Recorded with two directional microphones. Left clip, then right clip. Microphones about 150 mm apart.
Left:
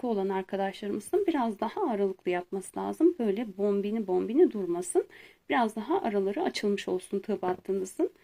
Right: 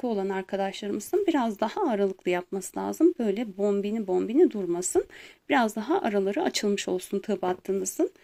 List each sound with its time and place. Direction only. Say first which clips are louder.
0.0 s speech: right 1 dB; 20° right (ahead or behind)